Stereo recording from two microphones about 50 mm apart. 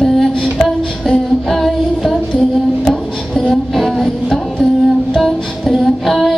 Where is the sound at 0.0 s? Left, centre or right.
Centre.